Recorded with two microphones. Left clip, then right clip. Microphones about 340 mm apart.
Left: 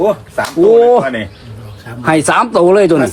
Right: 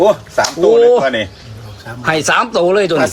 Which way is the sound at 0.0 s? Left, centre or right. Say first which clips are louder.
Right 2 dB; right.